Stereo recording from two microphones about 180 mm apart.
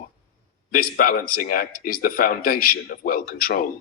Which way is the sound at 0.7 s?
50° left (ahead or behind).